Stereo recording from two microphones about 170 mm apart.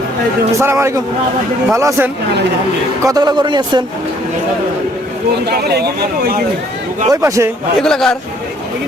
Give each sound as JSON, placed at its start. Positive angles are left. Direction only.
{"t": 0.6, "sound": "a man's voice", "side_deg": -15}
{"t": 5.5, "sound": "speech", "side_deg": -70}
{"t": 7.1, "sound": "a man's voice", "side_deg": -20}
{"t": 7.8, "sound": "speech", "side_deg": 5}